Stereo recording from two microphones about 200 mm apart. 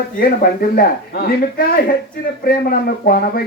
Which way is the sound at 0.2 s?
45° left (ahead or behind).